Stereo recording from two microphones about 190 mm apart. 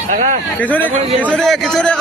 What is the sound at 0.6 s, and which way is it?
A man's voice, 10° left (ahead or behind).